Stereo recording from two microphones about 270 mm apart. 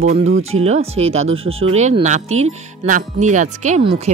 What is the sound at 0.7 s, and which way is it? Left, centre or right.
Speech, right.